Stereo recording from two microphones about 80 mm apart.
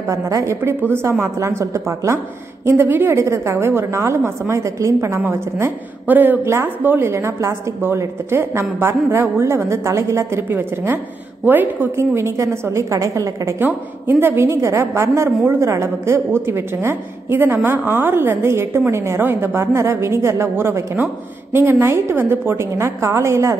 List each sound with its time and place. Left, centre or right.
0.1 s a woman's voice: right
2.6 s a woman's voice: right
6.0 s a woman's voice: right
13.6 s a woman's voice: right